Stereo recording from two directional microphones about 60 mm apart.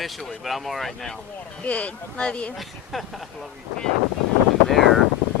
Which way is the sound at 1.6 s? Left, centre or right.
Left.